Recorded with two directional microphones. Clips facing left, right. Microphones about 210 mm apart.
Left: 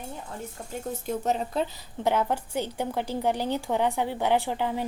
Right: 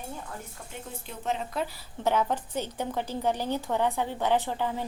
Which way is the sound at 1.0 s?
40° left (ahead or behind).